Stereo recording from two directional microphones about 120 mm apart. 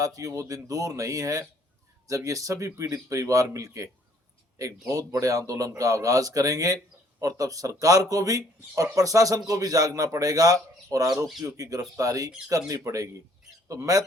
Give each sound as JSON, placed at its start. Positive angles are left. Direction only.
{"t": 0.0, "sound": "a man's voice", "side_deg": -30}